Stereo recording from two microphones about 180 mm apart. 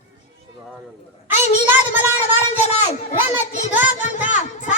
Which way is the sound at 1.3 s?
40° left (ahead or behind).